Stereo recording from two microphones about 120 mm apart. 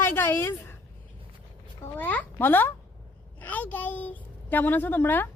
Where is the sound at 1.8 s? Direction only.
15° left (ahead or behind).